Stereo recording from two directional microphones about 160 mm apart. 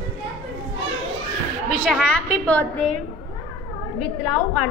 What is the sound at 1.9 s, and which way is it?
A woman's voice, centre (ahead or behind).